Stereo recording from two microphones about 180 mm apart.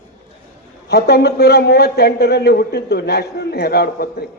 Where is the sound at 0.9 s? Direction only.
60° left (ahead or behind).